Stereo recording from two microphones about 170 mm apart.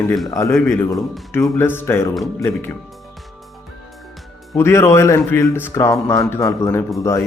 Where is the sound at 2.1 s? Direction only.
Centre (ahead or behind).